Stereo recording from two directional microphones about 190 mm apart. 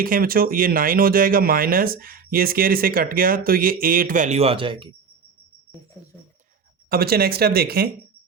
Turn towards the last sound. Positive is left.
turn(degrees=-55)  # may be behind; listen again after turning